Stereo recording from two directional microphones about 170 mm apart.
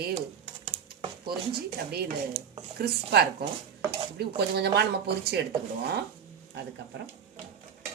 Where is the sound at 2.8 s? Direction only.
70° right (ahead or behind).